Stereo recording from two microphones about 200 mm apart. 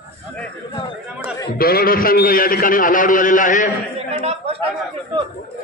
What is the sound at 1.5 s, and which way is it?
A man's voice, 50° left (ahead or behind).